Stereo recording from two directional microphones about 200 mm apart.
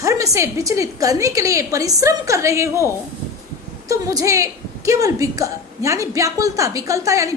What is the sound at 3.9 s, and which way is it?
A woman's voice, 15° right (ahead or behind).